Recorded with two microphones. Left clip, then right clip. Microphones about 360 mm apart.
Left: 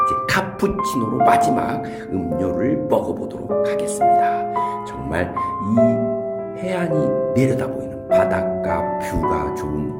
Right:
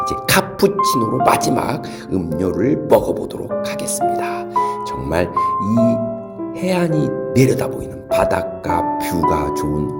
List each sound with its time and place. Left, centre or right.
0.0 s music: centre
1.2 s speech: centre
8.1 s music: centre
9.3 s speech: centre